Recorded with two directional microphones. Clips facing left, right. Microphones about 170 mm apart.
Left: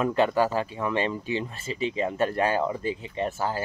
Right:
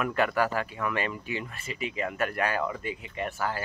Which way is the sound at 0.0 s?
25° left (ahead or behind).